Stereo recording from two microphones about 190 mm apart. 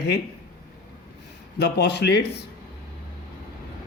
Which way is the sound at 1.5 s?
60° left (ahead or behind).